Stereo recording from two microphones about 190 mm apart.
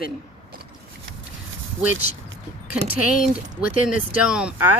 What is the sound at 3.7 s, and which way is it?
Speech, 45° left (ahead or behind).